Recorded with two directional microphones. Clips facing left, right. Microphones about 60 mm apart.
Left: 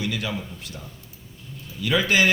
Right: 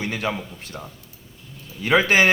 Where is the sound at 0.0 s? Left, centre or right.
Right.